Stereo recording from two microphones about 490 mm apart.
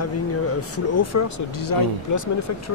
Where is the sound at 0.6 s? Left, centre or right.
Left.